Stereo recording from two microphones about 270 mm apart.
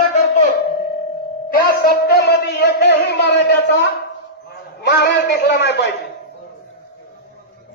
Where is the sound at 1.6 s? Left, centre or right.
Left.